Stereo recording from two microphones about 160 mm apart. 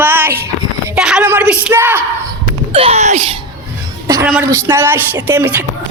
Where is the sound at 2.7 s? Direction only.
35° right (ahead or behind).